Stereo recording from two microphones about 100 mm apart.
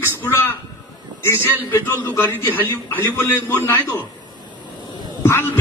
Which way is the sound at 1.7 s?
20° left (ahead or behind).